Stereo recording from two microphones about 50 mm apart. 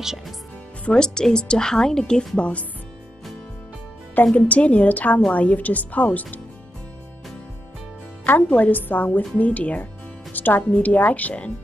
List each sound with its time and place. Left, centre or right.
0.8 s speech: centre
4.3 s a woman's voice: left
8.5 s a woman's voice: left